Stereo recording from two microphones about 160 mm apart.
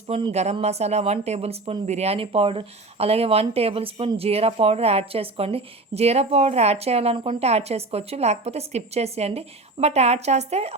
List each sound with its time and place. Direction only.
0.1 s speech: 40° right (ahead or behind)